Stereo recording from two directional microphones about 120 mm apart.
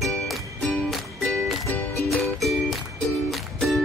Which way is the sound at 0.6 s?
15° left (ahead or behind).